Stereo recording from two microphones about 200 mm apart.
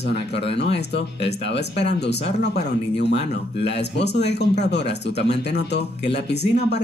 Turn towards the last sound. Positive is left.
turn(degrees=55)  # may be behind; listen again after turning